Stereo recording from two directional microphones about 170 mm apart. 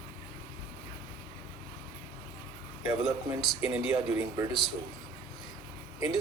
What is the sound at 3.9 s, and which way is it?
Speech, 20° right (ahead or behind).